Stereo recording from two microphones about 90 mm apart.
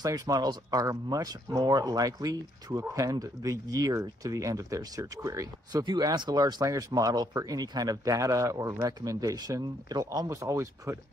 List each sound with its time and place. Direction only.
0.0 s speech: 40° right (ahead or behind)